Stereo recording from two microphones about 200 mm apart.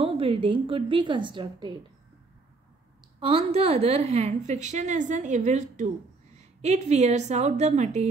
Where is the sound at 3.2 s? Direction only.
30° right (ahead or behind).